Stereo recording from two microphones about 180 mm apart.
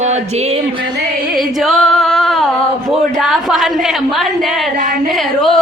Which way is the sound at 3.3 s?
Centre (ahead or behind).